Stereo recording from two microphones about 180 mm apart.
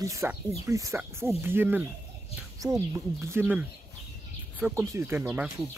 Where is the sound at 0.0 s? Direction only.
15° right (ahead or behind).